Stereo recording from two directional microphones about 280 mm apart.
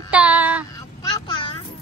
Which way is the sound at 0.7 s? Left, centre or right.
Centre.